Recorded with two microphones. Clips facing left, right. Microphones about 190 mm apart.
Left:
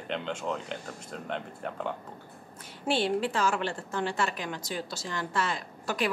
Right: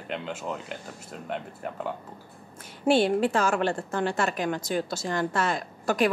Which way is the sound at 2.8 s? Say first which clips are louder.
Right 6 dB; 50° right (ahead or behind).